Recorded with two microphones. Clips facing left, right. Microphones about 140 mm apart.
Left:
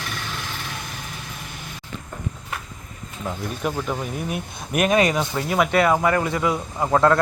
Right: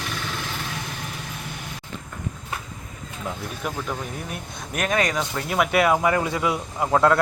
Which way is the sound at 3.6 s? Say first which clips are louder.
Left 4 dB; 10° left (ahead or behind).